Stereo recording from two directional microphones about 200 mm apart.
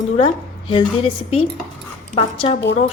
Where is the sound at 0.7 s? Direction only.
30° left (ahead or behind).